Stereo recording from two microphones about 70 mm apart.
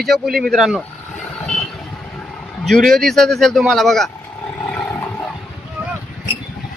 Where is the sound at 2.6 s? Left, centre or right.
Centre.